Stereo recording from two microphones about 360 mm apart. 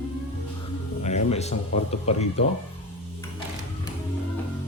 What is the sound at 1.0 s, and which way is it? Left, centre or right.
Speech, centre.